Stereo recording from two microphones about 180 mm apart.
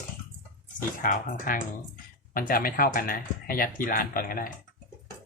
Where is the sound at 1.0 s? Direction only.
50° left (ahead or behind).